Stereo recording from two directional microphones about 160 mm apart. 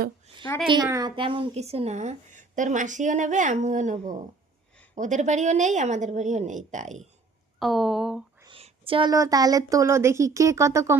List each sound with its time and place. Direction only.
0.9 s speech: 20° right (ahead or behind)
1.1 s a woman's voice: 35° right (ahead or behind); by 7.0 s 50° right (ahead or behind)
7.6 s speech: centre (ahead or behind)
8.5 s speech: 35° right (ahead or behind); by 10.9 s 20° right (ahead or behind)